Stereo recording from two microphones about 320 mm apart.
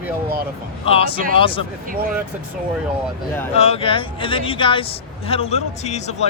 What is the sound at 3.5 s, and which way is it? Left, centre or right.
Speech, centre.